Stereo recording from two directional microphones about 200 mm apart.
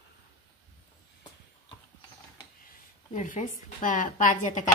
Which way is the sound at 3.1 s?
40° left (ahead or behind).